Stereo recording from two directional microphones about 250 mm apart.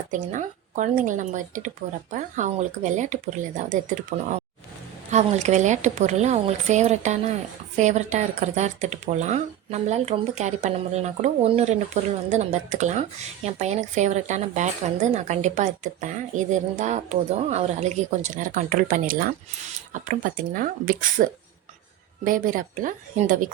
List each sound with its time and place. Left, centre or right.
0.1 s speech: right